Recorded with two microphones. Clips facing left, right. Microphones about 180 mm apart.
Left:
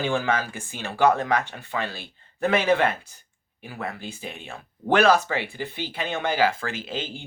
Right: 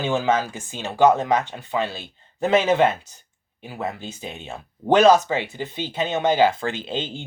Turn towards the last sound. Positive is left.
turn(degrees=-25)  # may be behind; listen again after turning